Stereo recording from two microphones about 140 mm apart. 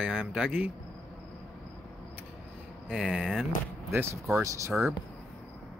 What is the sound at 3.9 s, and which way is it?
Speech, 20° right (ahead or behind).